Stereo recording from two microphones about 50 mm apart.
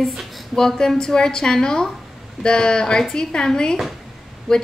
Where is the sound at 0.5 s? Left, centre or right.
Centre.